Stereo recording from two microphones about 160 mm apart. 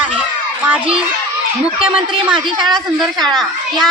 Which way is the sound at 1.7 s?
35° right (ahead or behind).